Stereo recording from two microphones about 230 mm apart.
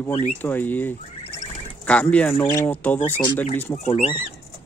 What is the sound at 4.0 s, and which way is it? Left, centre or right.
Speech, centre.